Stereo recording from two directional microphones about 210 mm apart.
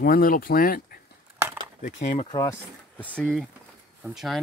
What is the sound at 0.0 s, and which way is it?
Speech, 45° left (ahead or behind).